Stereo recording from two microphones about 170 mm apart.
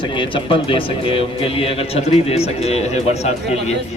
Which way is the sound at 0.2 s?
30° left (ahead or behind).